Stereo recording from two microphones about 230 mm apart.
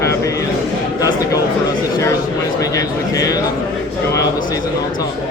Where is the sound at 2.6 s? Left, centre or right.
Centre.